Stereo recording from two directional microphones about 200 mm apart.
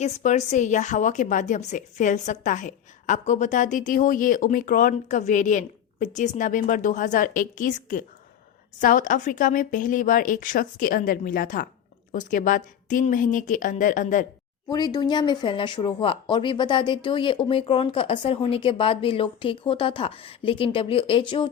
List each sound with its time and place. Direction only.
0.0 s a woman's voice: 35° left (ahead or behind)
14.7 s speech: 20° left (ahead or behind)